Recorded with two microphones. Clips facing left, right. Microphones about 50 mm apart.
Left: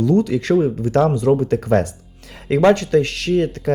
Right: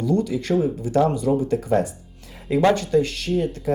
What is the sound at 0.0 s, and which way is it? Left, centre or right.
Speech, left.